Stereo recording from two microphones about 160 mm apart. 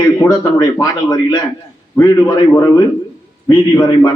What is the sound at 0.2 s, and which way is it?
A man's voice, 25° left (ahead or behind).